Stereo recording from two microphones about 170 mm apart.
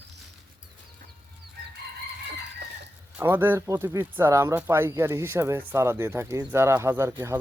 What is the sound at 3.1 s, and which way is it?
Speech, 10° right (ahead or behind).